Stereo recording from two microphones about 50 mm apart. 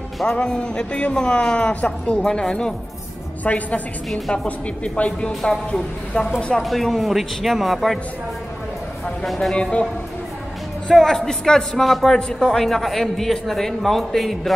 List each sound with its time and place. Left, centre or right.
0.2 s a man's voice: centre
1.8 s speech: left
2.2 s a man's voice: centre
3.4 s speech: left
5.3 s a man's voice: centre
6.6 s speech: centre
9.2 s speech: centre
9.6 s speech: left
10.9 s a man's voice: centre
12.2 s a man's voice: centre